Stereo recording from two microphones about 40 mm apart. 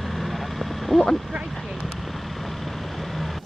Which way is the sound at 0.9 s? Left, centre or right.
Centre.